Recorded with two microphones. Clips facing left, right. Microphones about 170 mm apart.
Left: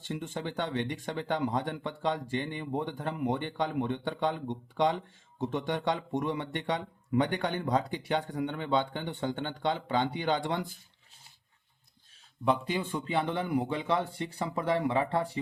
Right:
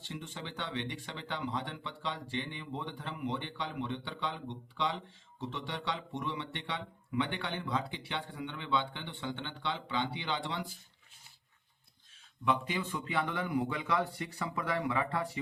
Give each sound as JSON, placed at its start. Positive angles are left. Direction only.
{"t": 0.0, "sound": "speech", "side_deg": 50}
{"t": 12.5, "sound": "a man's voice", "side_deg": 35}